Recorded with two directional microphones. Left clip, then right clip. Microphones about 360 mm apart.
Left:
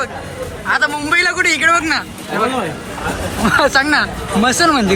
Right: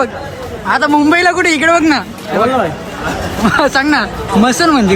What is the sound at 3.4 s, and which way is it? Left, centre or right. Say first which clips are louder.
Speech: right 1 dB; centre.